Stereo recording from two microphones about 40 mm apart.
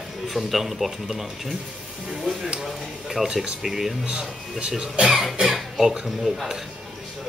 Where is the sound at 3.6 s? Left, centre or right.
Centre.